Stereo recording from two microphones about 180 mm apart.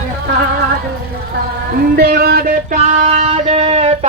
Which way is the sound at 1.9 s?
60° right (ahead or behind).